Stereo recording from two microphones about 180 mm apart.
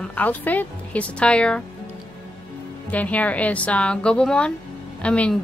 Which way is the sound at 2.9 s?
10° left (ahead or behind).